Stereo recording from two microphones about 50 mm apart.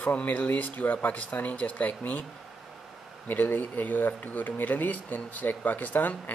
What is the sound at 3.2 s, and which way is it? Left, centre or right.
Speech, left.